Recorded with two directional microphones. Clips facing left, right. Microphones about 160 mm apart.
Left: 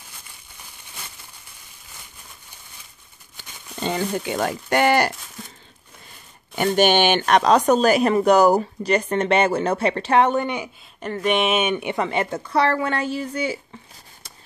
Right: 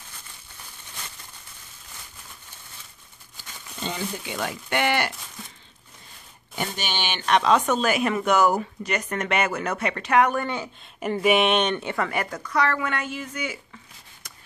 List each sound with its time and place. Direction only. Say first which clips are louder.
3.8 s speech: left 7 dB; 50° left (ahead or behind)
6.5 s speech: left 13 dB; 60° left (ahead or behind); by 10.7 s 20° left (ahead or behind)
11.0 s speech: right 1 dB; 10° right (ahead or behind); by 13.6 s 30° left (ahead or behind)